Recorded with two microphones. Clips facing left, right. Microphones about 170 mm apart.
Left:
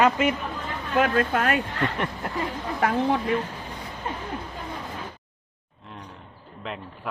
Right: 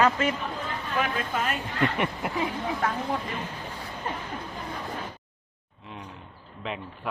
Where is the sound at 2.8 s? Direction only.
75° left (ahead or behind).